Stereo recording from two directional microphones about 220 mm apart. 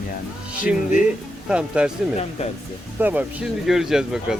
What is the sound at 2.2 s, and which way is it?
Speech, 30° left (ahead or behind).